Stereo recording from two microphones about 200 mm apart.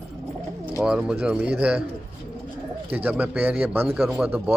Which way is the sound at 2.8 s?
10° right (ahead or behind).